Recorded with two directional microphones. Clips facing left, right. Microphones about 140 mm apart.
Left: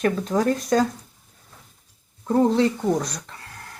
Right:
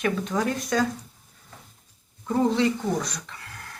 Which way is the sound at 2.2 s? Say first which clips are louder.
Left 4 dB; 35° left (ahead or behind).